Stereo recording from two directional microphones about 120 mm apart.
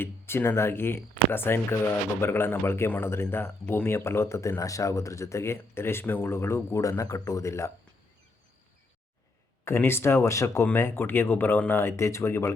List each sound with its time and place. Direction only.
0.0 s speech: 20° left (ahead or behind)
9.6 s speech: 20° left (ahead or behind)